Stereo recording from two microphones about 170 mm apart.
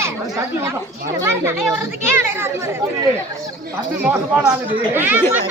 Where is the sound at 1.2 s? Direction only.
15° right (ahead or behind).